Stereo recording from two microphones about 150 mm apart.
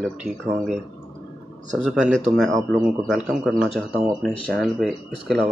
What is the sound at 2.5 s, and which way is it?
Speech, 25° right (ahead or behind).